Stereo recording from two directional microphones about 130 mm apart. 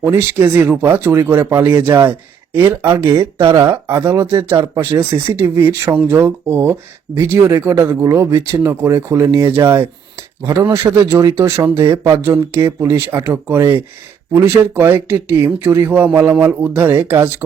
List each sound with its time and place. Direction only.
0.0 s speech: 20° right (ahead or behind)